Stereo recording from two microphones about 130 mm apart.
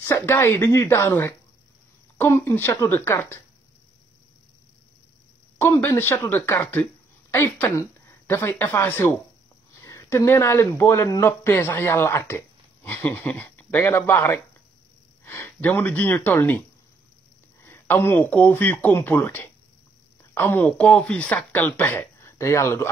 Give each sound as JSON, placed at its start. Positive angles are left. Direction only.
{"t": 0.0, "sound": "speech", "side_deg": 20}
{"t": 5.6, "sound": "speech", "side_deg": 15}
{"t": 17.6, "sound": "speech", "side_deg": 15}